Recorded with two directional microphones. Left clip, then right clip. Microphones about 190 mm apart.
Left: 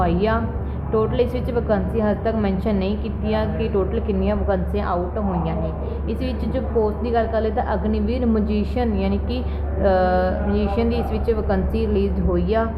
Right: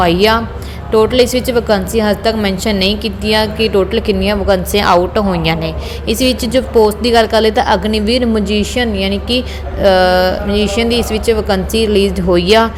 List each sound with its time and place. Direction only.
0.0 s a woman's voice: 35° right (ahead or behind)